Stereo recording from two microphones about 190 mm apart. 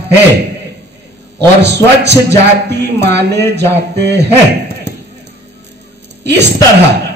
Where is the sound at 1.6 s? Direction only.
65° right (ahead or behind).